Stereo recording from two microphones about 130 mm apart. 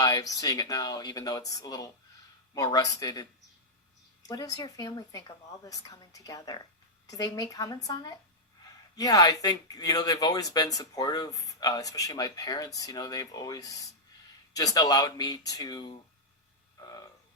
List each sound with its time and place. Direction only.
0.0 s speech: 25° left (ahead or behind)
4.3 s speech: 30° left (ahead or behind)
16.8 s frog: 30° left (ahead or behind)